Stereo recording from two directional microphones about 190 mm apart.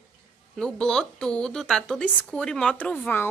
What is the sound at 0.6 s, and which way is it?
A woman's voice, 5° left (ahead or behind).